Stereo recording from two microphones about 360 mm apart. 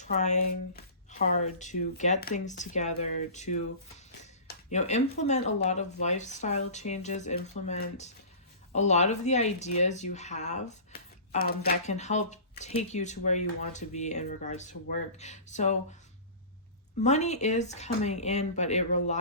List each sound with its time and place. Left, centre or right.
0.0 s speech: centre
17.0 s speech: centre